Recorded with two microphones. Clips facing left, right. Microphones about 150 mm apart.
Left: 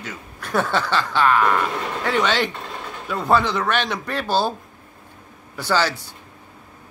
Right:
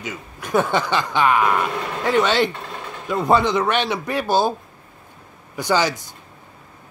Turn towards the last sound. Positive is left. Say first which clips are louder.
# right 2 dB
turn(degrees=-15)  # may be behind; listen again after turning